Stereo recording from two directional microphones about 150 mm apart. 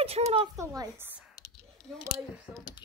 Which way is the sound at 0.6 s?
20° right (ahead or behind).